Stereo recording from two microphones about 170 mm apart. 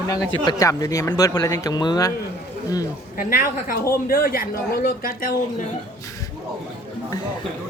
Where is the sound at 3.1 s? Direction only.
55° left (ahead or behind).